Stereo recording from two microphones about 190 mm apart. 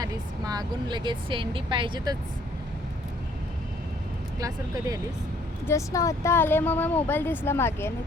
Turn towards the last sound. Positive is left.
turn(degrees=10)  # may be behind; listen again after turning